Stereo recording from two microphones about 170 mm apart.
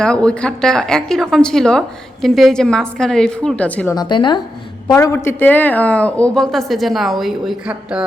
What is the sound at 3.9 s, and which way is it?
A woman's voice, 25° left (ahead or behind).